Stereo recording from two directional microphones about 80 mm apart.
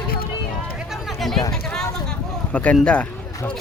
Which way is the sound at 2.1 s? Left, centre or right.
Centre.